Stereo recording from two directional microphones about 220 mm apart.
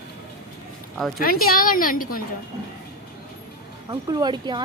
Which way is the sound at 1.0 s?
Centre (ahead or behind).